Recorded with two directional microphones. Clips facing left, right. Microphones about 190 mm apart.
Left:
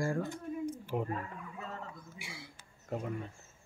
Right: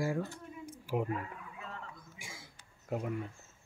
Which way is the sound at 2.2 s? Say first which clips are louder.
Left 3 dB; 45° right (ahead or behind).